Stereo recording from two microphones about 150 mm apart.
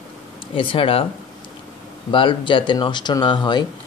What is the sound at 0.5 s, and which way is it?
Speech, 35° left (ahead or behind).